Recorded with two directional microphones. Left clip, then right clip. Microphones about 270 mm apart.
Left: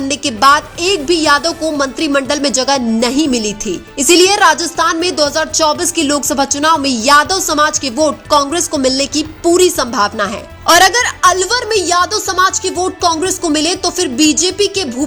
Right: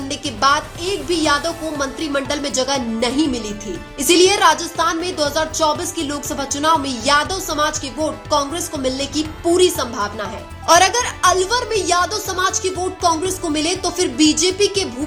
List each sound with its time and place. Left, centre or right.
0.1 s a woman's voice: left